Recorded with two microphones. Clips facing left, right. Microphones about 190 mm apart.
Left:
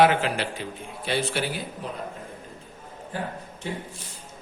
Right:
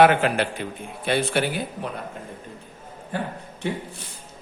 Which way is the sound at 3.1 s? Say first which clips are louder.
Right 3 dB; 65° right (ahead or behind).